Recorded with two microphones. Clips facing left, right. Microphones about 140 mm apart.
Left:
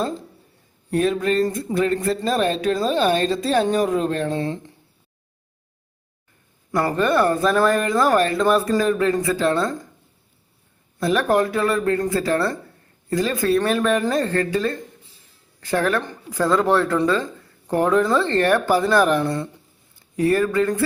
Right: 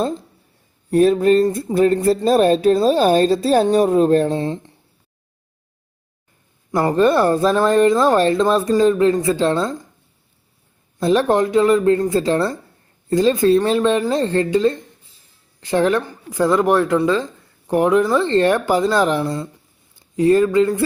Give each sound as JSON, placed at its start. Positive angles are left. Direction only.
{"t": 0.9, "sound": "speech", "side_deg": -35}
{"t": 4.3, "sound": "speech", "side_deg": -25}
{"t": 6.7, "sound": "speech", "side_deg": -30}
{"t": 11.0, "sound": "speech", "side_deg": -30}
{"t": 19.2, "sound": "speech", "side_deg": -5}
{"t": 20.1, "sound": "speech", "side_deg": -20}